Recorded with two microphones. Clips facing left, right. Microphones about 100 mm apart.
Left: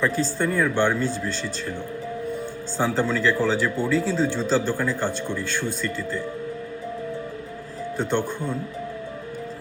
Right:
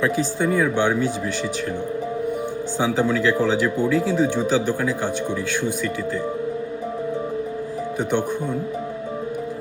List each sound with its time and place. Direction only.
0.0 s speech: 15° right (ahead or behind)
2.7 s speech: 15° right (ahead or behind)
7.9 s speech: 15° right (ahead or behind)